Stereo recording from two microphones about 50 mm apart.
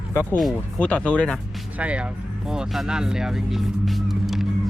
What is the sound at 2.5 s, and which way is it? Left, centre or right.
Speech, centre.